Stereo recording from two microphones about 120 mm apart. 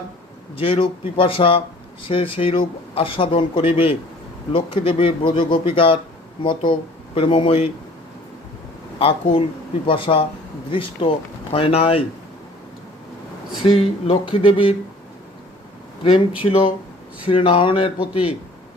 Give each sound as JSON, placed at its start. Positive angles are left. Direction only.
{"t": 0.5, "sound": "speech", "side_deg": 50}
{"t": 9.8, "sound": "speech", "side_deg": 50}
{"t": 13.7, "sound": "speech", "side_deg": 50}
{"t": 16.4, "sound": "speech", "side_deg": 45}